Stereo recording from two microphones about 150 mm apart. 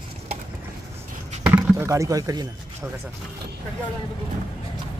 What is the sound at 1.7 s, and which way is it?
Speech, 20° right (ahead or behind).